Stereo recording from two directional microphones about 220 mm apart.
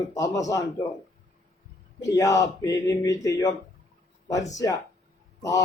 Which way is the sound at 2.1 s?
15° left (ahead or behind).